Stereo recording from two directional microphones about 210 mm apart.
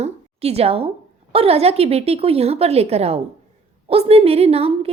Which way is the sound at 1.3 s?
30° right (ahead or behind).